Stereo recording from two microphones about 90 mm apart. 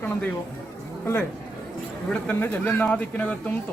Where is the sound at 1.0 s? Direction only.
25° left (ahead or behind).